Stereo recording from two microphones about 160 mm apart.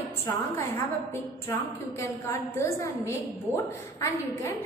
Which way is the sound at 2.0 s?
20° left (ahead or behind).